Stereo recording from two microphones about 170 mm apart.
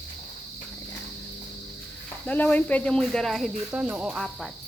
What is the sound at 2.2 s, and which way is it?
Speech, 10° left (ahead or behind).